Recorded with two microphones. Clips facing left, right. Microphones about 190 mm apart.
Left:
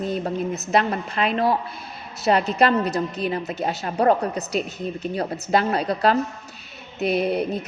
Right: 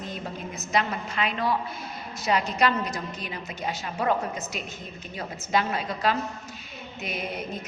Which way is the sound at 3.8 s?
40° left (ahead or behind).